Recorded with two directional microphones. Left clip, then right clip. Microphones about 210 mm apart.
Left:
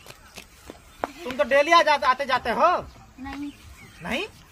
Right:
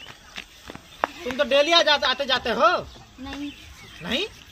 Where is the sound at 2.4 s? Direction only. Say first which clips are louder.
Right 1 dB; 20° left (ahead or behind).